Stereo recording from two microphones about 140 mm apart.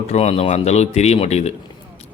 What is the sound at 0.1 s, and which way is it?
Speech, 45° left (ahead or behind).